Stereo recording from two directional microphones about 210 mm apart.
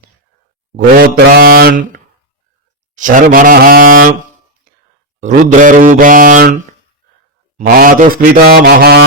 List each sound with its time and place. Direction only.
0.9 s a man's voice: 45° right (ahead or behind)
3.0 s speech: 40° right (ahead or behind)
5.2 s speech: 40° right (ahead or behind)
7.7 s a man's voice: 40° right (ahead or behind)